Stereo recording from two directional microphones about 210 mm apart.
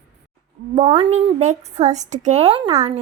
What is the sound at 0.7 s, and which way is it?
A woman's voice, 30° right (ahead or behind).